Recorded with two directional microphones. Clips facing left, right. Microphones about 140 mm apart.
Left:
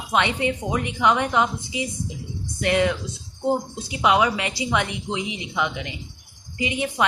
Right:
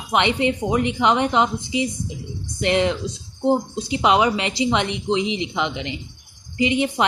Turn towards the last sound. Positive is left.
turn(degrees=-25)  # may be behind; listen again after turning